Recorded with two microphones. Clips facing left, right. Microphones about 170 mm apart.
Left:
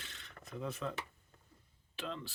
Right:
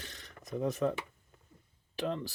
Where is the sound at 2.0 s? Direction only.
50° right (ahead or behind).